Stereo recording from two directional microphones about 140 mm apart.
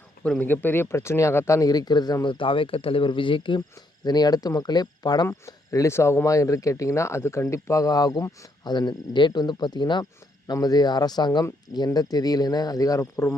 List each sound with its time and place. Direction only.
0.3 s speech: 10° left (ahead or behind)